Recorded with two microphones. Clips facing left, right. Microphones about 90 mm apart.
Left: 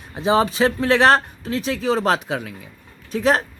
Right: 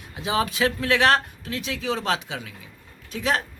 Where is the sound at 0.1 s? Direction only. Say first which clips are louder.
Left 7 dB; 35° left (ahead or behind); by 2.6 s 55° left (ahead or behind).